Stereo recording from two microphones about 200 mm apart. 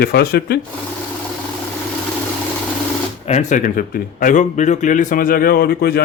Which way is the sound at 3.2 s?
35° left (ahead or behind).